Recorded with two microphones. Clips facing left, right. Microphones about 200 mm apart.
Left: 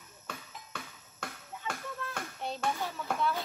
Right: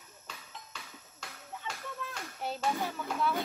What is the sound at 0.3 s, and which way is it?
Children playing, 55° left (ahead or behind).